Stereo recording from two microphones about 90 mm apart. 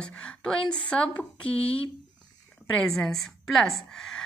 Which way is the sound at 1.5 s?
90° left.